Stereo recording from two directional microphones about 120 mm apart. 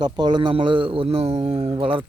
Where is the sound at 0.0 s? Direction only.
40° right (ahead or behind).